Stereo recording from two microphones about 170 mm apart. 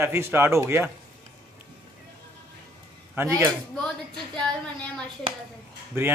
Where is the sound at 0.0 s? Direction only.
15° right (ahead or behind).